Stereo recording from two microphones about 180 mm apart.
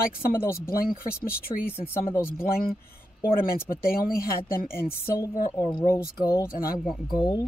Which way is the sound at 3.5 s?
55° left (ahead or behind).